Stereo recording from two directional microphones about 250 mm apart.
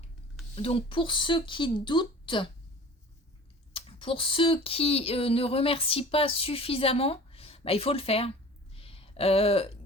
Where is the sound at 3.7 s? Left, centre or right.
Left.